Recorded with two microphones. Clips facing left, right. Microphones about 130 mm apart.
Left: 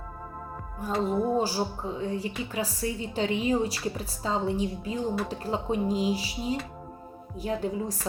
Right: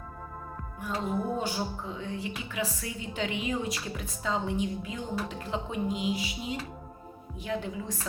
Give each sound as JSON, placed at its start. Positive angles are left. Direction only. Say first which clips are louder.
{"t": 0.8, "sound": "speech", "louder": "left 5 dB", "side_deg": 35}